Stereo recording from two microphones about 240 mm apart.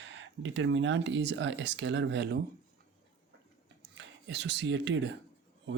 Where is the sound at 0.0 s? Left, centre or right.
Right.